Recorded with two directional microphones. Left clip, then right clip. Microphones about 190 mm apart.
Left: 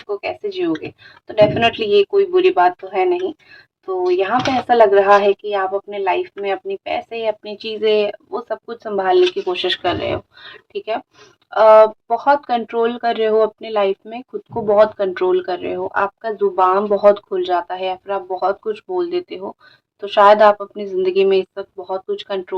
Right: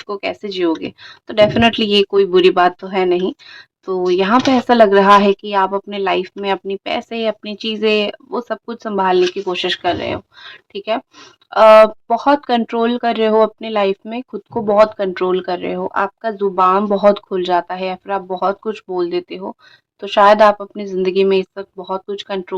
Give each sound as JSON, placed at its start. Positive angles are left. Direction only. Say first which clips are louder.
{"t": 0.1, "sound": "speech", "louder": "right 1 dB", "side_deg": -50}
{"t": 18.9, "sound": "speech", "louder": "right 2 dB", "side_deg": -25}